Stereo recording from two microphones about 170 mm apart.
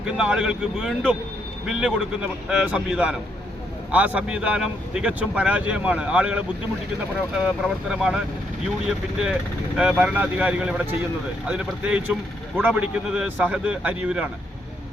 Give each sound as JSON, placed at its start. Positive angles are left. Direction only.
{"t": 0.0, "sound": "speech", "side_deg": -5}
{"t": 7.4, "sound": "speech", "side_deg": -5}
{"t": 9.7, "sound": "speech", "side_deg": -5}